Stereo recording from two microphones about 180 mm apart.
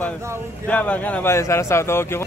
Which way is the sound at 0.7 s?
10° left (ahead or behind).